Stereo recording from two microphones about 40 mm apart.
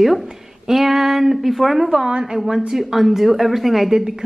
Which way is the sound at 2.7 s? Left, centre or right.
Centre.